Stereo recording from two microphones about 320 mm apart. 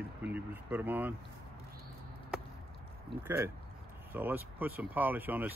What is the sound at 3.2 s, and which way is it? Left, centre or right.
Speech, centre.